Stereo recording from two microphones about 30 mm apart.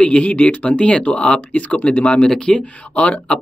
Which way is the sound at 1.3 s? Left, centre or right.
Left.